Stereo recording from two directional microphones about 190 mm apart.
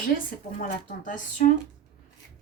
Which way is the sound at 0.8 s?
45° left (ahead or behind).